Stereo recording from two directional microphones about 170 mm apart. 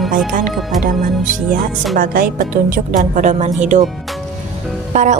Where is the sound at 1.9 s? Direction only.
55° right (ahead or behind).